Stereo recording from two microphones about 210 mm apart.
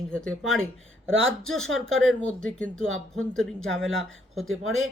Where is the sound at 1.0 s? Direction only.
70° right (ahead or behind).